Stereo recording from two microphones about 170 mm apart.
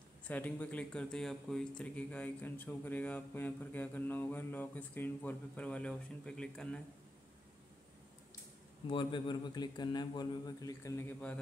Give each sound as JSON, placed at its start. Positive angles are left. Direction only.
{"t": 0.2, "sound": "speech", "side_deg": 10}
{"t": 8.8, "sound": "a man's voice", "side_deg": 30}